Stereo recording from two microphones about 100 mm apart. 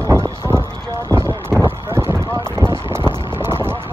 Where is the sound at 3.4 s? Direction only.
25° right (ahead or behind).